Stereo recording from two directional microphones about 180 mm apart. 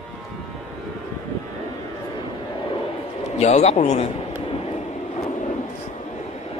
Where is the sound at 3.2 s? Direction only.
35° left (ahead or behind).